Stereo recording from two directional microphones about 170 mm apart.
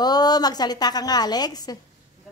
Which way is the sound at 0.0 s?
25° left (ahead or behind).